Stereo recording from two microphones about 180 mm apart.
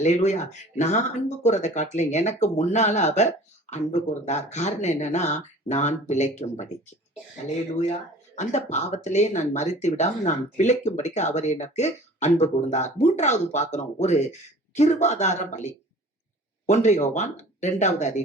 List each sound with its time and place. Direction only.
0.0 s speech: 40° left (ahead or behind)
8.4 s speech: 40° left (ahead or behind)